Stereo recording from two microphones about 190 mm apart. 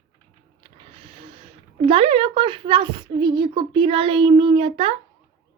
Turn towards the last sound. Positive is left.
turn(degrees=-30)  # may be behind; listen again after turning